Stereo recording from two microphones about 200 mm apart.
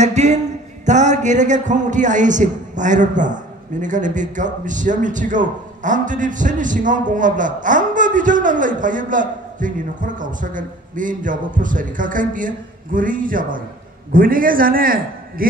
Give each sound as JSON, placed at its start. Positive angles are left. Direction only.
{"t": 0.0, "sound": "a man's voice", "side_deg": -35}